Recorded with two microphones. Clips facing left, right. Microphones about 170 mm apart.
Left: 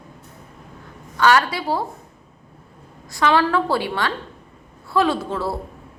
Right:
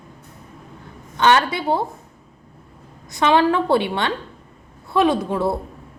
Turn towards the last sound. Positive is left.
turn(degrees=-20)  # may be behind; listen again after turning